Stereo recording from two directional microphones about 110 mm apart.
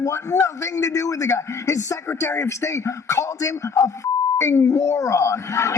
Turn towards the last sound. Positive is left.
turn(degrees=25)  # may be behind; listen again after turning